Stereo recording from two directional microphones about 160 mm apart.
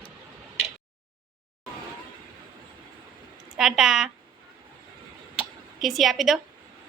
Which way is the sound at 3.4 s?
5° right (ahead or behind).